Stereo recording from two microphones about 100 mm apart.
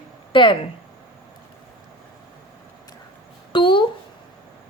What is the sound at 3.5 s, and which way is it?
Speech, 55° left (ahead or behind).